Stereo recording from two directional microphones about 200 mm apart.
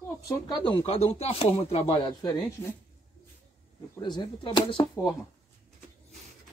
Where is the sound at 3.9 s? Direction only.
20° left (ahead or behind).